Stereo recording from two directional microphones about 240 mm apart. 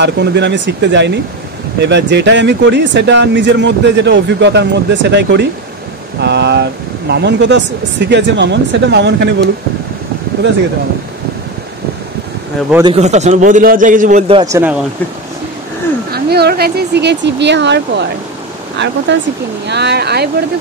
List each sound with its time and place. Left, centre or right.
0.0 s speech: right
12.8 s a man's voice: right; by 14.8 s centre
16.1 s speech: right
19.1 s speech: right